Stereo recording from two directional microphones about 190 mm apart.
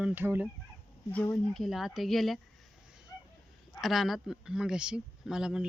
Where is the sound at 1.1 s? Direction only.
15° left (ahead or behind).